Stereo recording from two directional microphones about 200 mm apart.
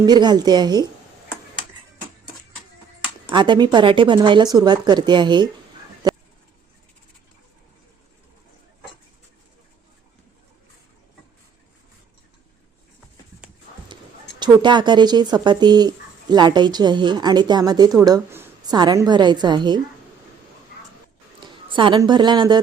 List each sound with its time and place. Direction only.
0.0 s speech: 20° right (ahead or behind)
3.3 s speech: 25° right (ahead or behind)
6.0 s a sound: 20° right (ahead or behind)
13.8 s speech: 25° right (ahead or behind)
21.4 s a woman's voice: 25° right (ahead or behind)